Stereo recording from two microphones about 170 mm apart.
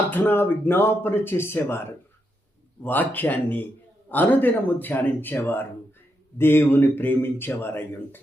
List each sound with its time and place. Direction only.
0.1 s a man's voice: 10° left (ahead or behind)